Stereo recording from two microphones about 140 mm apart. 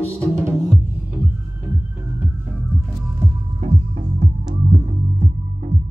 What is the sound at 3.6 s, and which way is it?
Music, 45° right (ahead or behind).